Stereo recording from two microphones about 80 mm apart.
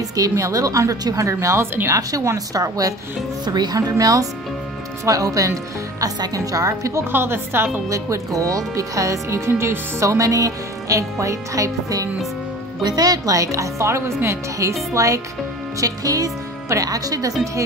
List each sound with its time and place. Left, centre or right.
0.1 s speech: right
3.4 s speech: right
4.0 s speech: right
7.9 s speech: right